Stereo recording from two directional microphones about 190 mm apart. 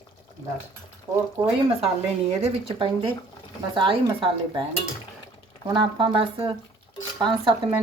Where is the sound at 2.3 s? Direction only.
30° right (ahead or behind).